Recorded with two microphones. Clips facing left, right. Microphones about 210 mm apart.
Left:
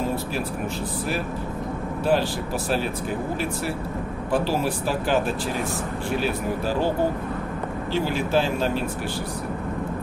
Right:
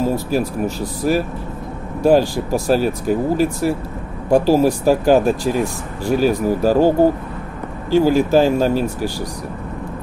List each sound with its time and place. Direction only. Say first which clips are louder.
0.0 s speech: right 8 dB; 40° right (ahead or behind)
7.9 s speech: right 10 dB; 40° right (ahead or behind)